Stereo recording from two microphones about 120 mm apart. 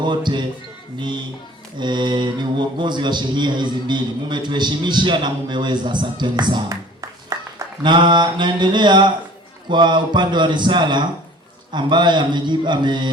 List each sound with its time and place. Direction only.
0.0 s a man's voice: 40° right (ahead or behind)
7.3 s a sound: 25° right (ahead or behind)
7.8 s a man's voice: 40° right (ahead or behind)